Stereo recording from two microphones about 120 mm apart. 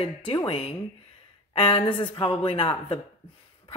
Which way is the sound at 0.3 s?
45° left (ahead or behind).